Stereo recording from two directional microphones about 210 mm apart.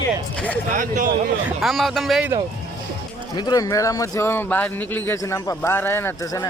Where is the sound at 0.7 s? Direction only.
40° right (ahead or behind).